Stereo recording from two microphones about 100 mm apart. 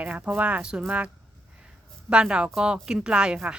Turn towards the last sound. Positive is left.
turn(degrees=-10)  # may be behind; listen again after turning